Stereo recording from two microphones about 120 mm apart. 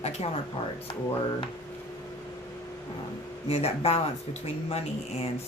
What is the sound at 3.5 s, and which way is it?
Speech, 55° left (ahead or behind).